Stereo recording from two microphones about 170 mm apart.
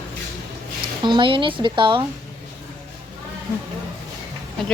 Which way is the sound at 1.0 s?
30° right (ahead or behind).